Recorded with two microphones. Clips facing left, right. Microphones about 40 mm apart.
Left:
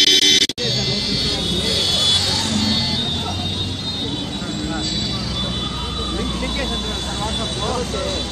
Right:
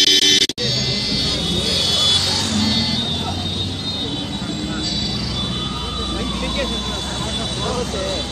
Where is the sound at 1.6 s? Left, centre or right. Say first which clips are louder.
Even; left.